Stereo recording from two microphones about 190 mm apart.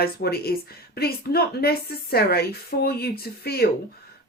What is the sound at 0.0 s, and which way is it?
Speech, 55° left (ahead or behind).